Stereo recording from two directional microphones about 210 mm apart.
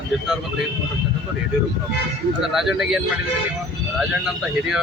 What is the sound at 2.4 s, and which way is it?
A man's voice, centre (ahead or behind).